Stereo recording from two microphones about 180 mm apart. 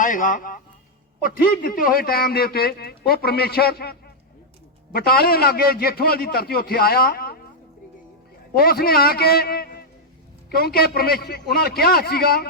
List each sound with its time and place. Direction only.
0.0 s a man's voice: 45° left (ahead or behind)
8.5 s a man's voice: 60° left (ahead or behind)